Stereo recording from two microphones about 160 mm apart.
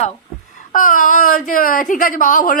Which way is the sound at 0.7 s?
55° left (ahead or behind).